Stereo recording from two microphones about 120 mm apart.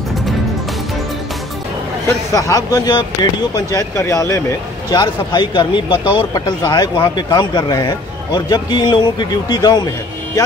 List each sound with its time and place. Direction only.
2.0 s speech: 25° left (ahead or behind)